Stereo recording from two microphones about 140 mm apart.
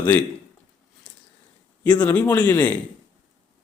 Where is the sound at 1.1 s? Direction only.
5° left (ahead or behind).